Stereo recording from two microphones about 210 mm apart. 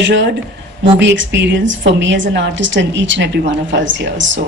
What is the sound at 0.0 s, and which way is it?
A woman's voice, 60° right (ahead or behind).